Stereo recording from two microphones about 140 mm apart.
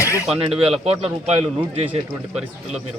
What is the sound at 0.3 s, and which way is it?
Speech, 45° right (ahead or behind).